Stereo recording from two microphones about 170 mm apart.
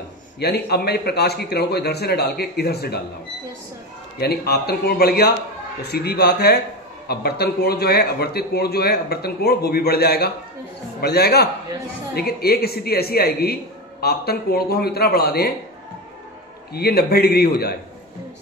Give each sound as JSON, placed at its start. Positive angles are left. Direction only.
{"t": 0.4, "sound": "a man's voice", "side_deg": 70}
{"t": 4.2, "sound": "a man's voice", "side_deg": 70}
{"t": 16.7, "sound": "a man's voice", "side_deg": 65}